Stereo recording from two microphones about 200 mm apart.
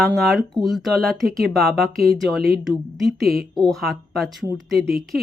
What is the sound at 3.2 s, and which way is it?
Speech, 50° right (ahead or behind).